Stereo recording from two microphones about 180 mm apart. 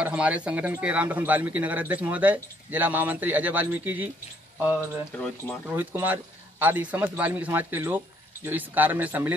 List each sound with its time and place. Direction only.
0.0 s speech: 5° right (ahead or behind)
5.1 s speech: 10° left (ahead or behind)
5.7 s speech: 10° right (ahead or behind)